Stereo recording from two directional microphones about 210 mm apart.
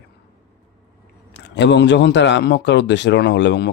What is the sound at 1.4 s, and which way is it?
A man's voice, 55° left (ahead or behind).